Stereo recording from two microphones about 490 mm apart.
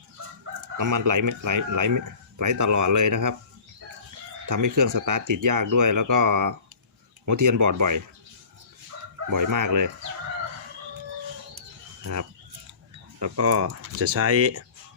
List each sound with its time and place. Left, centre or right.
0.8 s speech: right
4.4 s speech: right
9.3 s speech: right
13.1 s speech: right